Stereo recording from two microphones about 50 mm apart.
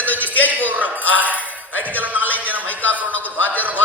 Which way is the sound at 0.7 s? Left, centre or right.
Right.